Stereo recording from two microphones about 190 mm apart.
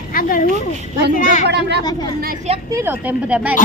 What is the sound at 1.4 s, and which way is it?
Speech, 60° right (ahead or behind).